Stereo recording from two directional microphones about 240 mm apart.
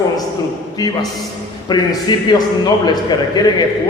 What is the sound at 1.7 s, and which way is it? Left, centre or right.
A man's voice, centre.